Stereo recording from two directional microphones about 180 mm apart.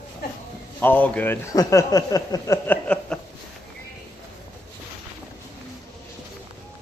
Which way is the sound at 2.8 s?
5° left (ahead or behind).